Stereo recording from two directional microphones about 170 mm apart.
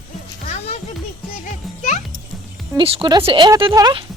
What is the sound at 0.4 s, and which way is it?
Music, 40° left (ahead or behind).